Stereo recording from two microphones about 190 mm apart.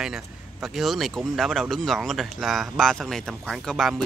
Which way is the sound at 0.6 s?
Centre (ahead or behind).